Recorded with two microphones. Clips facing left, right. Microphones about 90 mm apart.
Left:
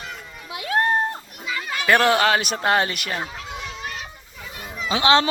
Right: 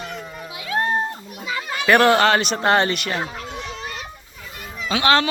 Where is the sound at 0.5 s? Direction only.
55° left (ahead or behind).